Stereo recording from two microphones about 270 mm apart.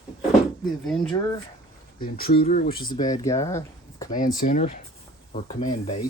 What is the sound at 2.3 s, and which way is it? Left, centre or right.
Speech, left.